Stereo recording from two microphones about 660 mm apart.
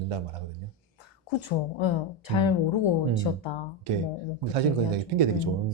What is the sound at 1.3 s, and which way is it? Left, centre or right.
Speech, left.